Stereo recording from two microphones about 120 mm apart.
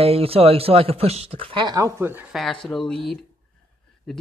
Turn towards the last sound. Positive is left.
turn(degrees=5)  # may be behind; listen again after turning